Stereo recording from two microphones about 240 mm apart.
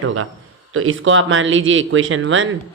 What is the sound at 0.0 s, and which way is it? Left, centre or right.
Speech, right.